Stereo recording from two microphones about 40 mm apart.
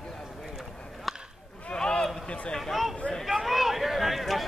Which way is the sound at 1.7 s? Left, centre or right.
Left.